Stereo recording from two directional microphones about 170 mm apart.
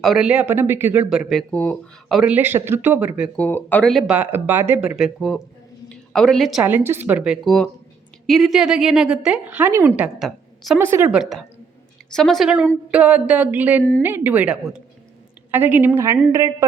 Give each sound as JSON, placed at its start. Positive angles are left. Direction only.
{"t": 0.0, "sound": "speech", "side_deg": -5}
{"t": 3.3, "sound": "a woman's voice", "side_deg": 10}
{"t": 10.8, "sound": "speech", "side_deg": -15}
{"t": 11.1, "sound": "a woman's voice", "side_deg": 0}